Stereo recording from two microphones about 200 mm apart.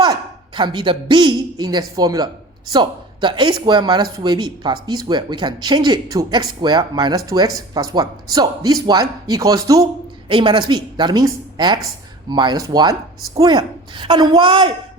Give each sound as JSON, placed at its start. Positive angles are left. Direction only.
{"t": 0.0, "sound": "a woman's voice", "side_deg": -20}